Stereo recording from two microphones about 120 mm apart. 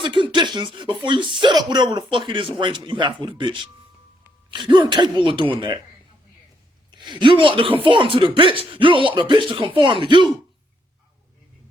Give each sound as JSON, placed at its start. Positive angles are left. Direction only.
{"t": 0.0, "sound": "speech", "side_deg": -45}
{"t": 6.9, "sound": "speech", "side_deg": -40}